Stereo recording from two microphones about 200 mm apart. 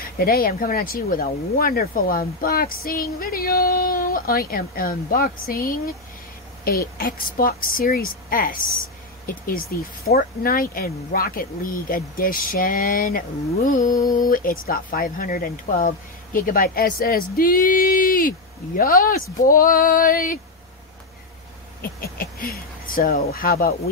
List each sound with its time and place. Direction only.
0.2 s speech: 45° left (ahead or behind)
22.0 s speech: 50° left (ahead or behind)